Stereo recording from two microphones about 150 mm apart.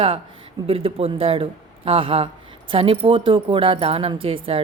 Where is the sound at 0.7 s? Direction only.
40° right (ahead or behind).